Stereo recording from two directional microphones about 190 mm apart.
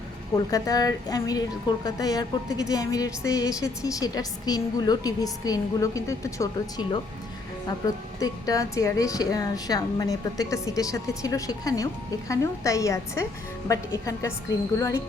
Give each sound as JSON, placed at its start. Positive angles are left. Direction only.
{"t": 0.3, "sound": "a woman's voice", "side_deg": 20}
{"t": 8.2, "sound": "a woman's voice", "side_deg": 20}